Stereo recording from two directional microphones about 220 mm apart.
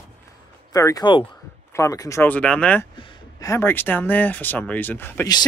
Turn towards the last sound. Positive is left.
turn(degrees=10)  # may be behind; listen again after turning